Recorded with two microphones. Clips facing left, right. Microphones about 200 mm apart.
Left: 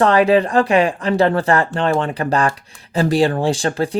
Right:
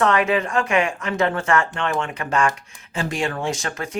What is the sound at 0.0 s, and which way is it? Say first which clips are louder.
Speech: left 6 dB; 35° left (ahead or behind).